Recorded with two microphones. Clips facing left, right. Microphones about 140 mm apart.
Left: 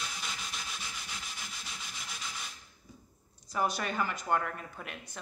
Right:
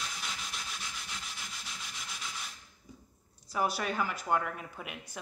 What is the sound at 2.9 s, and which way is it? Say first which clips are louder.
Dog: right 2 dB; 15° right (ahead or behind).